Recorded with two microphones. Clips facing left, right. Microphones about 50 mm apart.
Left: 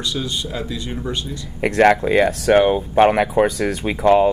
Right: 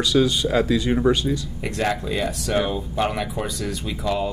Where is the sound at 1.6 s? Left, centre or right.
Left.